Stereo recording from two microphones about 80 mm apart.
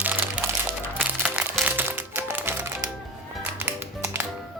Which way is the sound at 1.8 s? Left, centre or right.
Right.